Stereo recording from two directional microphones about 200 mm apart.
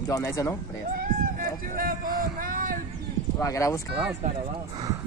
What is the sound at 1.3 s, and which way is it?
Speech, 45° right (ahead or behind).